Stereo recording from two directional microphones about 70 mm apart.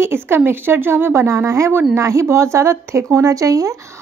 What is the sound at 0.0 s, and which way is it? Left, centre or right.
Speech, right.